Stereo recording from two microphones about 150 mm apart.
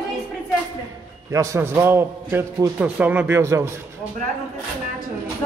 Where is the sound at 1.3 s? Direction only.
20° right (ahead or behind).